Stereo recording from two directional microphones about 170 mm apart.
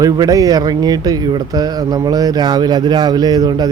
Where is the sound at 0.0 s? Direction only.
20° right (ahead or behind).